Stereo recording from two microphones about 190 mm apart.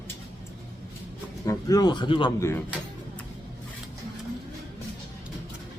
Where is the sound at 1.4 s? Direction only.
20° left (ahead or behind).